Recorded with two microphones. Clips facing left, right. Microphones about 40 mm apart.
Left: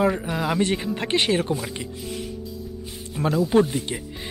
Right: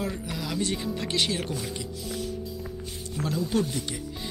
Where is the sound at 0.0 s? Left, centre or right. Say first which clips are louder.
Left 10 dB; left.